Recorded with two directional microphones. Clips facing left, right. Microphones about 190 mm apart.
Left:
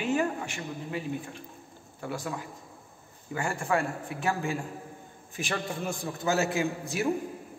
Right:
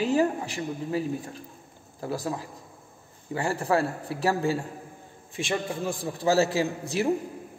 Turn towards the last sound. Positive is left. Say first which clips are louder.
# right 3 dB
turn(degrees=-30)  # may be behind; listen again after turning